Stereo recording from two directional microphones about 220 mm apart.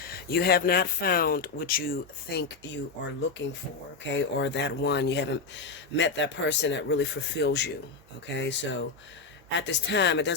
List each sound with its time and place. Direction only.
0.0 s speech: 45° left (ahead or behind)
4.0 s speech: 55° left (ahead or behind)